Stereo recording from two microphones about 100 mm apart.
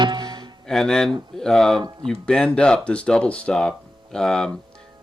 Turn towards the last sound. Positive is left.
turn(degrees=5)  # may be behind; listen again after turning